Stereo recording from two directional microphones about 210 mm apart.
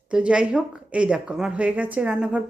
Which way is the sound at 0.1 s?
5° right (ahead or behind).